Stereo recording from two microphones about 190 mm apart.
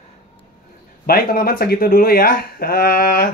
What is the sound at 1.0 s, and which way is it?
Speech, 50° left (ahead or behind).